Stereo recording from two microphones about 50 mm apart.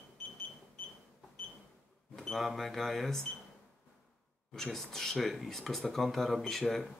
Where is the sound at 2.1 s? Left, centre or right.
Centre.